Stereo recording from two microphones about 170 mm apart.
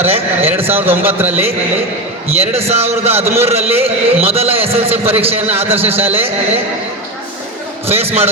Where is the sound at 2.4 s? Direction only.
35° right (ahead or behind).